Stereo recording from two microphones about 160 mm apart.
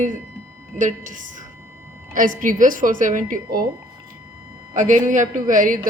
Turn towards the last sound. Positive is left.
turn(degrees=-55)  # may be behind; listen again after turning